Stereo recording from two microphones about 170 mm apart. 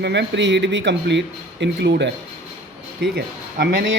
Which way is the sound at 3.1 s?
80° right.